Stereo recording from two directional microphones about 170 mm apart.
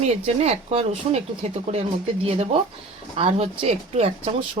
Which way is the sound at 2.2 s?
35° right (ahead or behind).